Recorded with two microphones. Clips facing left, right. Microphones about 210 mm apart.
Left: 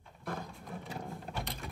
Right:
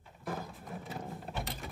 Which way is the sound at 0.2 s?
Centre (ahead or behind).